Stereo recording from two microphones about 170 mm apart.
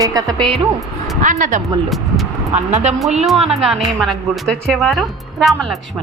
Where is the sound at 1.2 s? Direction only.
50° right (ahead or behind).